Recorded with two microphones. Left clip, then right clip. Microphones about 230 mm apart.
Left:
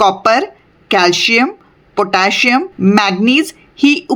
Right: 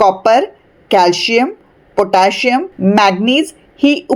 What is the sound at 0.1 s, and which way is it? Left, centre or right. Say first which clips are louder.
A woman's voice: right 2 dB; centre.